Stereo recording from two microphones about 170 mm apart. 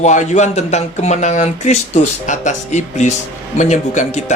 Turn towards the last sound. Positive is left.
turn(degrees=45)  # may be behind; listen again after turning